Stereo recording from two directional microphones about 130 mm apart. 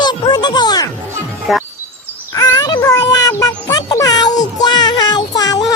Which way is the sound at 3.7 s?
25° left (ahead or behind).